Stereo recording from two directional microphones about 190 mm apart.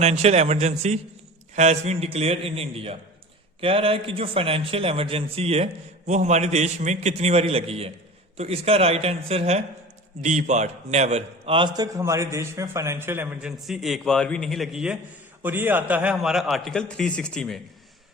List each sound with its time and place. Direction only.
0.0 s a man's voice: 35° right (ahead or behind)
11.9 s a man's voice: 15° right (ahead or behind); by 17.6 s 5° left (ahead or behind)